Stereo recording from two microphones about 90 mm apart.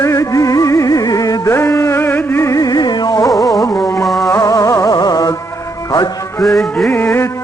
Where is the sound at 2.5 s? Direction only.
45° left (ahead or behind).